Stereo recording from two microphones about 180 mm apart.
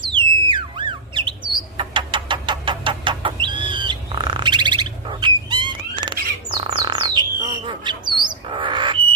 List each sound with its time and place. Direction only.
0.0 s theremin: 25° right (ahead or behind)
1.8 s a sound: 30° right (ahead or behind)
6.7 s bird: 25° right (ahead or behind)